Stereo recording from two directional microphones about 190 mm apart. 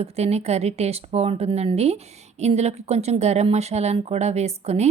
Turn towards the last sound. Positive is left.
turn(degrees=-35)  # may be behind; listen again after turning